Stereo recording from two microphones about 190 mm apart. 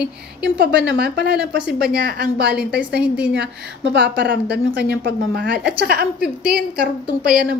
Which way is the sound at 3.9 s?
60° right (ahead or behind).